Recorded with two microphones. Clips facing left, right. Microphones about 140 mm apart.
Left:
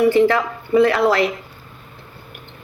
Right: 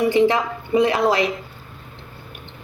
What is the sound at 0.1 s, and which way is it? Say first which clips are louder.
A woman's voice: left 2 dB; 15° right (ahead or behind).